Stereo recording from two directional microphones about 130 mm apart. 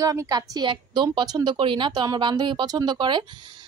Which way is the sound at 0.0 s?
25° right (ahead or behind).